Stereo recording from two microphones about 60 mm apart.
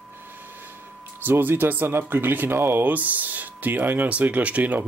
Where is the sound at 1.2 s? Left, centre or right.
Right.